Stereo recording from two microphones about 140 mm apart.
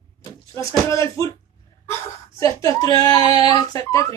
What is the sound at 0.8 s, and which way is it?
Speech, 20° left (ahead or behind).